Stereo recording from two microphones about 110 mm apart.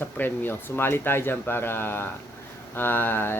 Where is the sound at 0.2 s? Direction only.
20° left (ahead or behind).